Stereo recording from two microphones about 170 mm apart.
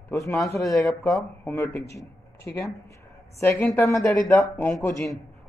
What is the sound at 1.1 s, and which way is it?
Speech, 10° left (ahead or behind).